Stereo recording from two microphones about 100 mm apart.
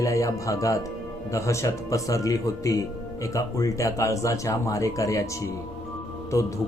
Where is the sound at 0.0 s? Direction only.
35° left (ahead or behind).